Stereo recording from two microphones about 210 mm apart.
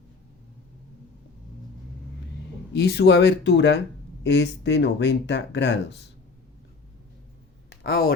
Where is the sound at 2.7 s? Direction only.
50° left (ahead or behind).